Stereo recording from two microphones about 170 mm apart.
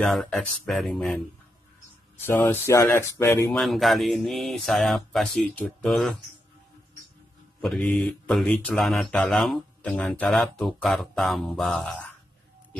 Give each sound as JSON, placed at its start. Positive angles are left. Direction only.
{"t": 0.0, "sound": "speech", "side_deg": 0}
{"t": 2.2, "sound": "speech", "side_deg": 15}
{"t": 3.5, "sound": "speech", "side_deg": 0}
{"t": 7.6, "sound": "speech", "side_deg": 0}